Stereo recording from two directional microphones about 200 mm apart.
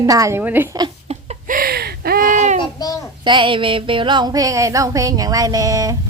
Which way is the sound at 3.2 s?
25° right (ahead or behind).